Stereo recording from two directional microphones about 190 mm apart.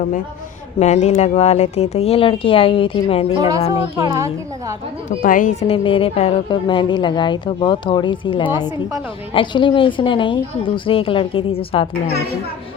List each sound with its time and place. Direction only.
0.8 s speech: 35° left (ahead or behind)
3.9 s a woman's voice: 15° right (ahead or behind)
5.0 s speech: 45° left (ahead or behind); by 8.4 s 25° left (ahead or behind)
8.4 s a woman's voice: 10° right (ahead or behind)
9.3 s speech: 25° left (ahead or behind)